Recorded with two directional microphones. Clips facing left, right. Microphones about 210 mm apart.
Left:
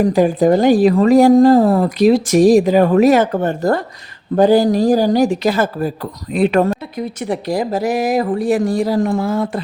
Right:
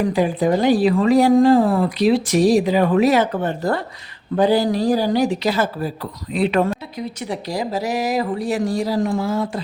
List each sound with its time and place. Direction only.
0.0 s speech: 45° left (ahead or behind)